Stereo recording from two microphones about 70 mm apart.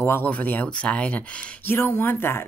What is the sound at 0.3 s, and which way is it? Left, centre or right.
Speech, left.